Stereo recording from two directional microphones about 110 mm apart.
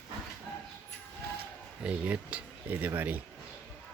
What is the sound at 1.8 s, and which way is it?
Speech, 10° right (ahead or behind).